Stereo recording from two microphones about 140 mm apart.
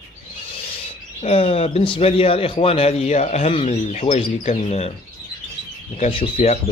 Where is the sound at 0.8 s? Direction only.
45° left (ahead or behind).